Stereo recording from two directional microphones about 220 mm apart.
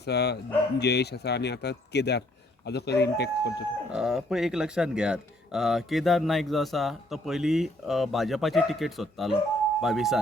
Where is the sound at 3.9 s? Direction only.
Centre (ahead or behind).